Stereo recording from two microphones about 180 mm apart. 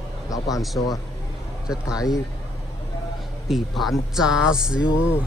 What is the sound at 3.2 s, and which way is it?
Speech, centre (ahead or behind).